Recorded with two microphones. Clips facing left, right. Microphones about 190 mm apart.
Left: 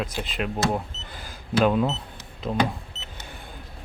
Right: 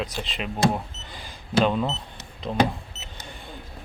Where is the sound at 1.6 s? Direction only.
5° left (ahead or behind).